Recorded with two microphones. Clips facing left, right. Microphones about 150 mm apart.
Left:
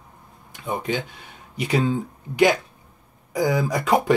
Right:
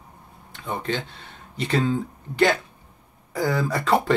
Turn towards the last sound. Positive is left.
turn(degrees=15)  # may be behind; listen again after turning